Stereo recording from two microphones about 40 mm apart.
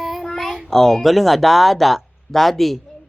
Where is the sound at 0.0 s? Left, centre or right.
Centre.